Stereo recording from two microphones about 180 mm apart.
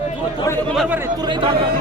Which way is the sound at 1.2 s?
25° right (ahead or behind).